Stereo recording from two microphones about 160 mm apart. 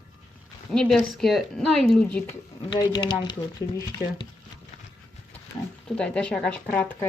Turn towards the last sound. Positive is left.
turn(degrees=10)  # may be behind; listen again after turning